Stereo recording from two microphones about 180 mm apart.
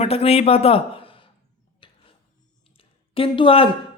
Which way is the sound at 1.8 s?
25° left (ahead or behind).